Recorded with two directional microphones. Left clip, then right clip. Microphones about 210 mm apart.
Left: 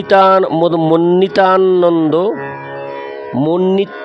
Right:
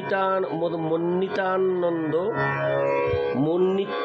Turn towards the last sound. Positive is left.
turn(degrees=50)  # may be behind; listen again after turning